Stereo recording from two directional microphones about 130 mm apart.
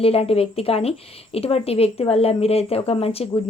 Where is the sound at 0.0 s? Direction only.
50° left (ahead or behind).